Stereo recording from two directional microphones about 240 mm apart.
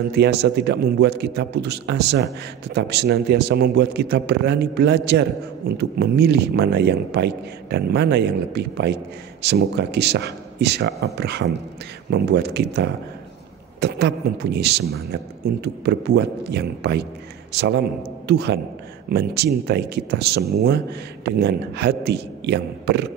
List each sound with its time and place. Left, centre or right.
0.1 s a man's voice: right